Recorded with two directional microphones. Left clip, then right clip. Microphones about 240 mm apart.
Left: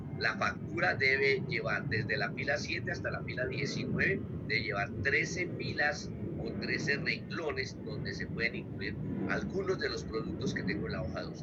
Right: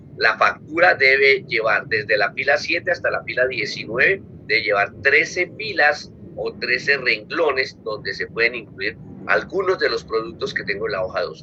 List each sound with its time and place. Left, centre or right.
0.2 s a man's voice: right